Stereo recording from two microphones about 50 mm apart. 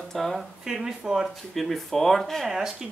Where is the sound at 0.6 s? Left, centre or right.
Centre.